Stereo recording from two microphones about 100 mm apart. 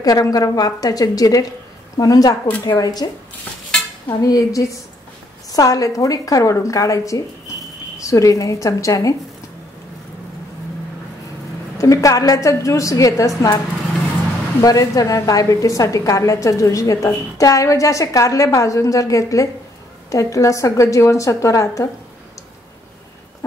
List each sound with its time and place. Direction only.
0.0 s a woman's voice: 40° left (ahead or behind)
4.1 s a woman's voice: 40° left (ahead or behind)
11.8 s a woman's voice: 35° left (ahead or behind)
14.6 s a woman's voice: 35° left (ahead or behind)